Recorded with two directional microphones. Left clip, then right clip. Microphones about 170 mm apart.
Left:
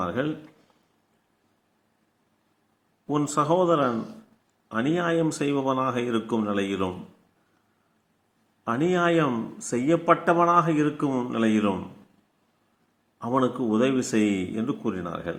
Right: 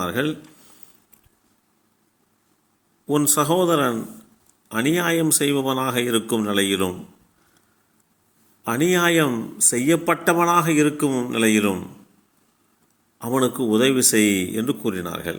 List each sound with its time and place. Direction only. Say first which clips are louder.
0.0 s speech: right 4 dB; 20° right (ahead or behind)
3.1 s a man's voice: right 4 dB; 20° right (ahead or behind)
8.6 s a man's voice: right 4 dB; 20° right (ahead or behind)
13.1 s a man's voice: right 3 dB; 20° right (ahead or behind)